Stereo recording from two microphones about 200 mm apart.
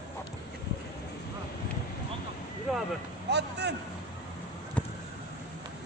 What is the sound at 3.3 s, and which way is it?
Speech, 55° right (ahead or behind).